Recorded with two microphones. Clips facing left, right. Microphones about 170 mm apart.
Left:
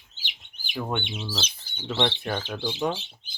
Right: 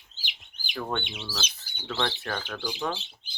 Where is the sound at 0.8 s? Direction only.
15° left (ahead or behind).